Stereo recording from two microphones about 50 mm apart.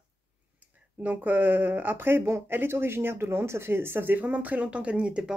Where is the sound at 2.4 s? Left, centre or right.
Right.